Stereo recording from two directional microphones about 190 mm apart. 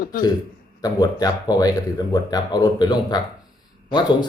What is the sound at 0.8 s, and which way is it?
Speech, 20° left (ahead or behind).